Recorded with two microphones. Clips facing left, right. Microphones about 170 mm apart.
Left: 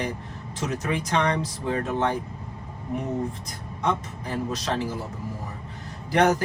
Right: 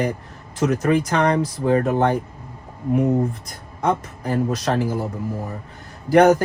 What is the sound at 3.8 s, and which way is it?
Speech, 60° right (ahead or behind).